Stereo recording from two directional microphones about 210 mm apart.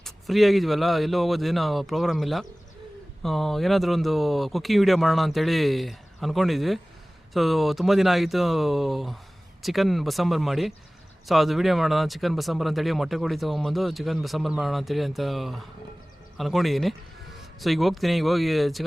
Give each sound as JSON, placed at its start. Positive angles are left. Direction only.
{"t": 0.0, "sound": "speech", "side_deg": 0}